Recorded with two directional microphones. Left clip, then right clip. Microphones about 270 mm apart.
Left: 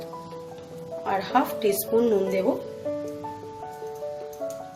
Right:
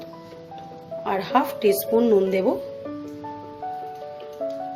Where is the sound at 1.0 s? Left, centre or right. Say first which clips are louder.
Right 2 dB; right.